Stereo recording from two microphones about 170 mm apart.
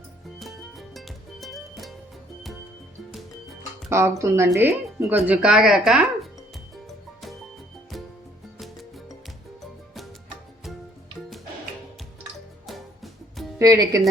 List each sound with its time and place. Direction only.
0.3 s music: centre (ahead or behind)
3.1 s music: centre (ahead or behind)
3.8 s speech: 15° right (ahead or behind)
6.8 s music: centre (ahead or behind)
8.5 s music: centre (ahead or behind)
12.6 s music: centre (ahead or behind)
13.6 s speech: 20° right (ahead or behind)